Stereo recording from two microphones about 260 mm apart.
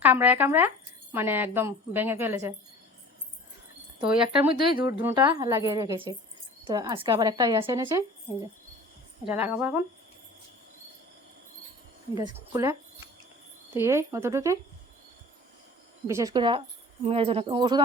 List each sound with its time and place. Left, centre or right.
0.0 s a woman's voice: centre
4.0 s speech: centre
4.5 s a woman's voice: centre
9.6 s a woman's voice: centre
12.1 s a woman's voice: centre
13.7 s a woman's voice: centre
16.0 s speech: centre